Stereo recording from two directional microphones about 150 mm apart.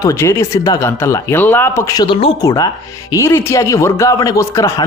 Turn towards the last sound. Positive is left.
turn(degrees=20)  # may be behind; listen again after turning